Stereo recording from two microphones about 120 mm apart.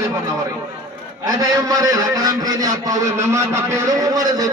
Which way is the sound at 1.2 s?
35° right (ahead or behind).